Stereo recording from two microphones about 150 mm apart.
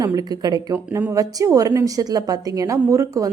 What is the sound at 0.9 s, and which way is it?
A woman's voice, 15° right (ahead or behind).